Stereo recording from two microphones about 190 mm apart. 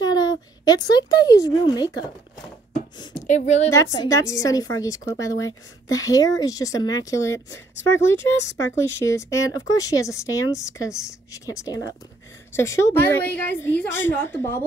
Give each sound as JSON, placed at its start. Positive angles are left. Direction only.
{"t": 0.0, "sound": "speech", "side_deg": 20}
{"t": 3.3, "sound": "a woman's voice", "side_deg": 35}
{"t": 3.7, "sound": "a woman's voice", "side_deg": 20}